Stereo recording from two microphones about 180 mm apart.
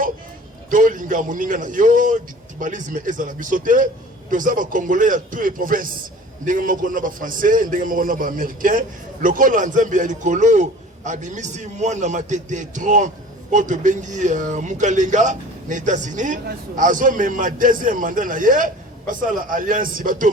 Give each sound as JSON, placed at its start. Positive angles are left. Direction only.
{"t": 0.7, "sound": "speech", "side_deg": -45}